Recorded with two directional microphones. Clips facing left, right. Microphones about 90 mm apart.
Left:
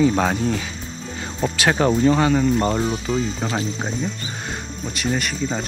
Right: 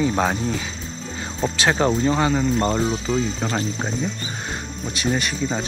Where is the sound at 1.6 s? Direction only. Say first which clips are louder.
Left 2 dB; 25° right (ahead or behind).